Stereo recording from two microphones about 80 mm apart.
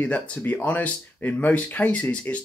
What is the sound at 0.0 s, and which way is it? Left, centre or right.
Speech, centre.